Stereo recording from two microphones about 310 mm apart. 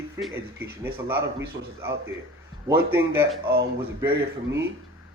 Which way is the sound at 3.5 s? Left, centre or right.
Right.